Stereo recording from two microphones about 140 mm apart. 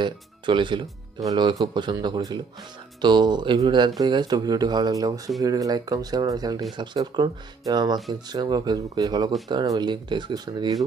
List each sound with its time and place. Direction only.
0.0 s speech: 35° right (ahead or behind)